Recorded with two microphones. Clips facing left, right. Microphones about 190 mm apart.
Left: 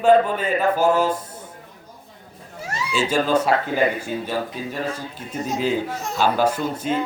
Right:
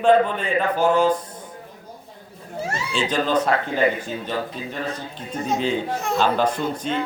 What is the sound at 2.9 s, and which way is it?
Speech, 10° left (ahead or behind).